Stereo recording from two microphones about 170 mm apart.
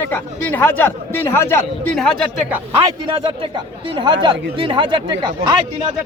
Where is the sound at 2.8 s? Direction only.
30° right (ahead or behind).